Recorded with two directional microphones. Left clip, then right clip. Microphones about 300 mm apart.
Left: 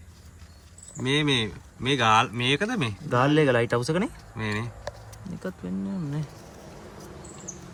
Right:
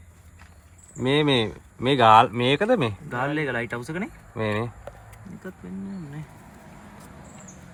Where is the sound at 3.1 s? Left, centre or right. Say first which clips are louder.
Left 10 dB; left.